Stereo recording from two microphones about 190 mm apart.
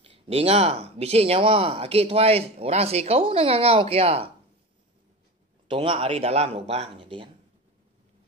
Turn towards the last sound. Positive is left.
turn(degrees=-25)  # may be behind; listen again after turning